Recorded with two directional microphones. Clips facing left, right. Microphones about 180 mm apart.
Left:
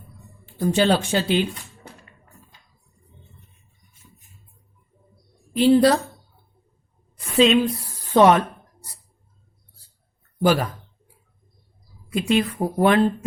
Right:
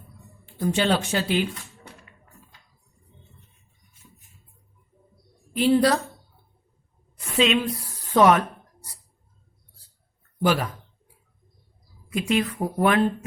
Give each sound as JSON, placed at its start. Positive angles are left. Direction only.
{"t": 0.6, "sound": "a sound", "side_deg": 35}
{"t": 5.5, "sound": "a woman's voice", "side_deg": 30}
{"t": 7.3, "sound": "a woman's voice", "side_deg": 35}
{"t": 10.4, "sound": "speech", "side_deg": 40}
{"t": 12.1, "sound": "speech", "side_deg": 30}